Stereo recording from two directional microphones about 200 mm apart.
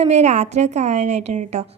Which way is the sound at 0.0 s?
35° right (ahead or behind).